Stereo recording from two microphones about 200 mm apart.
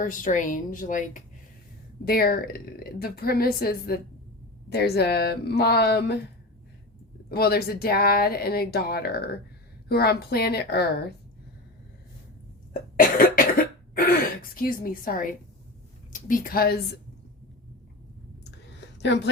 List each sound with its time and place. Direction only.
0.0 s speech: 40° left (ahead or behind)
7.3 s speech: 50° left (ahead or behind)
13.0 s cough: 45° left (ahead or behind)
14.5 s speech: 45° left (ahead or behind)
18.9 s speech: 60° left (ahead or behind)